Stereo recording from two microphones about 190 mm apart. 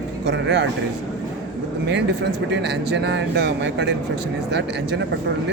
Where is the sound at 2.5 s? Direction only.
65° right (ahead or behind).